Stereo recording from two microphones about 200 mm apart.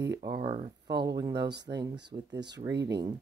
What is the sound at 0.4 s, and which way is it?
Speech, 30° right (ahead or behind).